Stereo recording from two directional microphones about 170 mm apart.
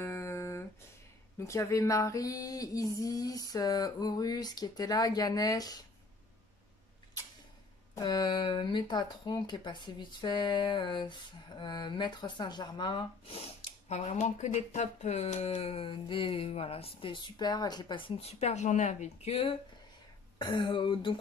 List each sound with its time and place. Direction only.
0.0 s a sound: 15° left (ahead or behind)
1.4 s speech: 15° left (ahead or behind)
7.9 s speech: 25° left (ahead or behind)
20.3 s speech: 25° left (ahead or behind)